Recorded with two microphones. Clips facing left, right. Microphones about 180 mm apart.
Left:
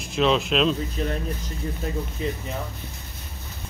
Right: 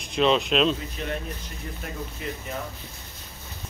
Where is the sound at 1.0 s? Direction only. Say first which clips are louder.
Left 4 dB; 35° left (ahead or behind).